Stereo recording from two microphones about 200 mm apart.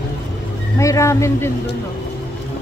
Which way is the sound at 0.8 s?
15° left (ahead or behind).